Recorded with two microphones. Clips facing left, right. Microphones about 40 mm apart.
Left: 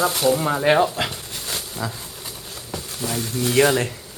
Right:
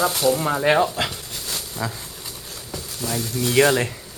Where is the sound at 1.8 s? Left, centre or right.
Centre.